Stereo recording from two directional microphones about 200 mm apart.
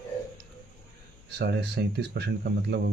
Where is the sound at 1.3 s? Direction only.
55° right (ahead or behind).